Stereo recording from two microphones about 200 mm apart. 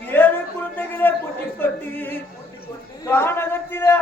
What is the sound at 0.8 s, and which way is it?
Speech, 10° left (ahead or behind).